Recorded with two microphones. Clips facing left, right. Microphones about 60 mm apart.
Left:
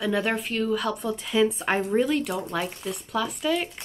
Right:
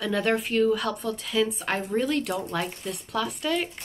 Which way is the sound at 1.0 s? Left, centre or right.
Centre.